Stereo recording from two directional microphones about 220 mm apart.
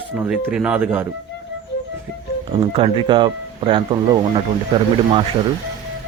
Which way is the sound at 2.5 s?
25° right (ahead or behind).